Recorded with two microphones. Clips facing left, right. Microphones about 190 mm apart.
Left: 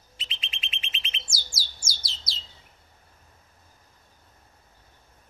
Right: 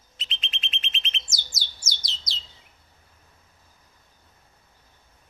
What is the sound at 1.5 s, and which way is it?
Bird, 25° left (ahead or behind).